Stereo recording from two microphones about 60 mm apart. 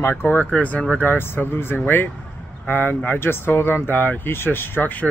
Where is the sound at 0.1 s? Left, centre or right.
Left.